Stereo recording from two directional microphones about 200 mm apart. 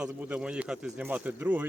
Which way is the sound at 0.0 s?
5° right (ahead or behind).